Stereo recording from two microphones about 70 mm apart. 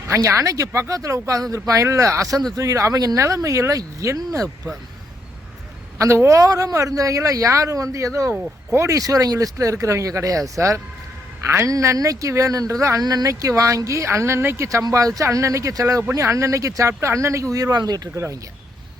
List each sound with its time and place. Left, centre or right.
0.1 s a man's voice: right
3.2 s a man's voice: right
6.0 s a man's voice: right
11.4 s speech: right
11.7 s a man's voice: right
13.0 s a man's voice: right
14.8 s a man's voice: right
17.7 s speech: right
18.1 s a man's voice: right